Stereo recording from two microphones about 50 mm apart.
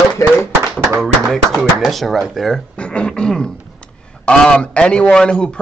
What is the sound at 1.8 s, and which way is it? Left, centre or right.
Speech, centre.